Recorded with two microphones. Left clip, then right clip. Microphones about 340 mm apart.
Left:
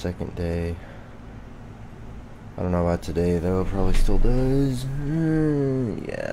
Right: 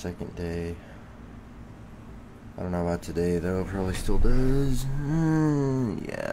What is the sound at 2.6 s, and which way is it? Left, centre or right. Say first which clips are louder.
Speech: left 5 dB; centre.